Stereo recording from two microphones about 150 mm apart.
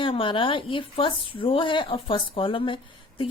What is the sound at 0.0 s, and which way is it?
Speech, 35° left (ahead or behind).